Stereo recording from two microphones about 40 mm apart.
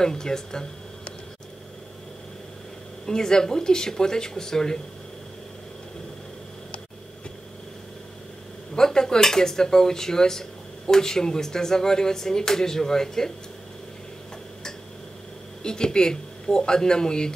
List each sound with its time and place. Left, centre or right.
0.0 s speech: centre
3.1 s speech: centre
8.7 s speech: centre
15.6 s speech: centre